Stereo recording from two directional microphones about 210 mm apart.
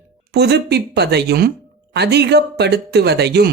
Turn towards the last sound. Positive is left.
turn(degrees=-50)  # may be behind; listen again after turning